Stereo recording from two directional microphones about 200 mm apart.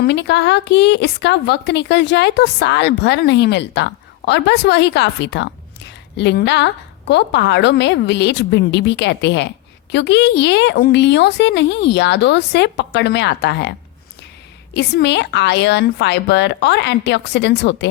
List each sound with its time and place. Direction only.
0.0 s a woman's voice: 60° left (ahead or behind)